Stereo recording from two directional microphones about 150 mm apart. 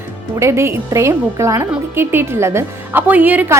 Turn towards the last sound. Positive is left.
turn(degrees=-10)  # may be behind; listen again after turning